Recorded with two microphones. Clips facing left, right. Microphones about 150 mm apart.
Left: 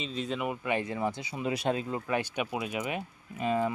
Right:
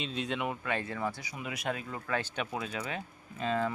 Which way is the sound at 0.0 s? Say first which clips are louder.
Left 1 dB; centre (ahead or behind).